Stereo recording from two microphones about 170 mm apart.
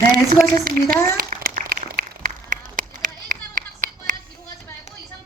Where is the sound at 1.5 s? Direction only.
60° right (ahead or behind).